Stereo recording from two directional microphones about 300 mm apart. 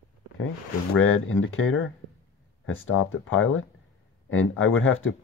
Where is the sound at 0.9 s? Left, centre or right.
Left.